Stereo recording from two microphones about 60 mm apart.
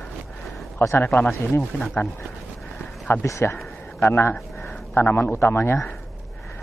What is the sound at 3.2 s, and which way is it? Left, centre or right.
Speech, left.